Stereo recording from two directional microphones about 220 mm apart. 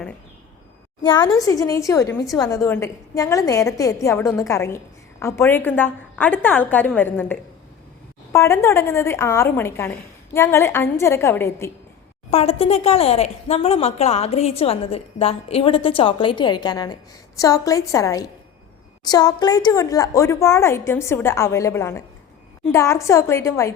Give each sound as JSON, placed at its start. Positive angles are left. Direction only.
{"t": 1.0, "sound": "a woman's voice", "side_deg": 20}
{"t": 12.3, "sound": "a woman's voice", "side_deg": 25}